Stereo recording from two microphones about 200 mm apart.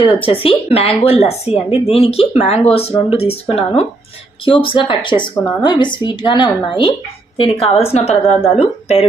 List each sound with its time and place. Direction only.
0.0 s a woman's voice: 25° left (ahead or behind)
4.4 s a woman's voice: 25° left (ahead or behind)